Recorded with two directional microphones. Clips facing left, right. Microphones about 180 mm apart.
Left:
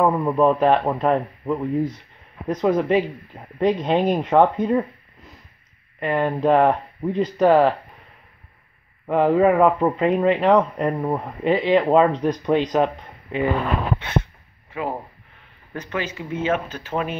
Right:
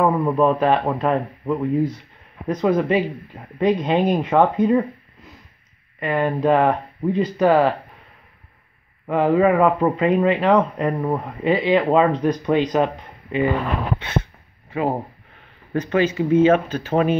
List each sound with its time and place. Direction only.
0.0 s speech: centre (ahead or behind)
5.9 s speech: 5° right (ahead or behind)
9.0 s speech: centre (ahead or behind)
14.7 s speech: 35° right (ahead or behind)